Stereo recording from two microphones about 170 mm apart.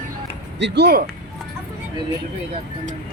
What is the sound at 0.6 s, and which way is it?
Speech, 85° right.